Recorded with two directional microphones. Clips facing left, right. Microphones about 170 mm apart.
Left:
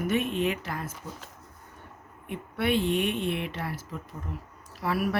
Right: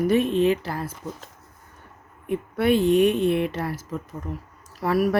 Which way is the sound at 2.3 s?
40° right (ahead or behind).